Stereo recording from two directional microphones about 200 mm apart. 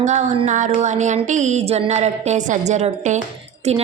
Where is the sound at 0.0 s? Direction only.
35° right (ahead or behind).